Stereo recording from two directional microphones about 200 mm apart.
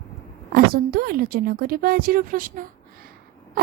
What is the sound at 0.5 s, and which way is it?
A woman's voice, 45° right (ahead or behind).